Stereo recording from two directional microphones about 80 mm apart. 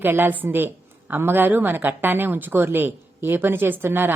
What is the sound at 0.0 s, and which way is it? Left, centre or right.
A woman's voice, right.